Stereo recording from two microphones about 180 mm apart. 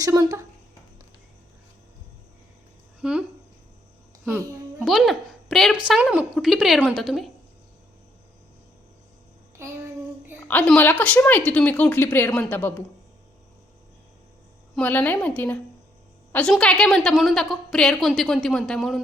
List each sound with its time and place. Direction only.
0.0 s a woman's voice: 20° right (ahead or behind)
3.0 s speech: 5° right (ahead or behind)
4.3 s a woman's voice: 10° right (ahead or behind)
10.5 s speech: 10° left (ahead or behind)
14.8 s speech: 10° left (ahead or behind)
16.3 s a woman's voice: 5° left (ahead or behind)